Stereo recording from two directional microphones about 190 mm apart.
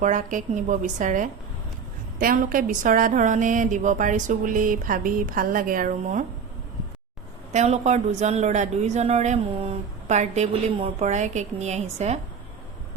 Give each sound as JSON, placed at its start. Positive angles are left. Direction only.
{"t": 0.0, "sound": "a woman's voice", "side_deg": -40}
{"t": 7.5, "sound": "speech", "side_deg": -35}